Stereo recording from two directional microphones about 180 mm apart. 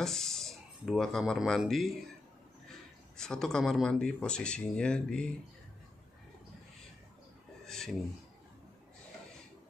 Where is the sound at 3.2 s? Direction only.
5° left (ahead or behind).